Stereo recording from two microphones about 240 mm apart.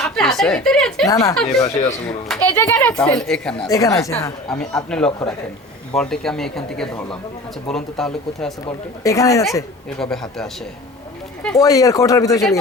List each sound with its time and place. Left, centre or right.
0.0 s speech: centre
1.0 s a child's voice: centre
1.6 s speech: left
2.0 s a child's voice: centre
3.7 s a child's voice: centre
4.4 s speech: centre
9.0 s a child's voice: centre
10.0 s speech: centre
11.4 s a child's voice: centre